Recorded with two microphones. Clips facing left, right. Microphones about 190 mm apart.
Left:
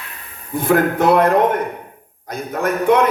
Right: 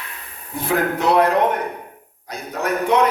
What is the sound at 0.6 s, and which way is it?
Speech, 50° left (ahead or behind).